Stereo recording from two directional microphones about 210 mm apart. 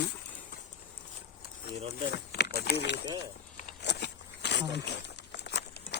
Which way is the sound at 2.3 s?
50° left (ahead or behind).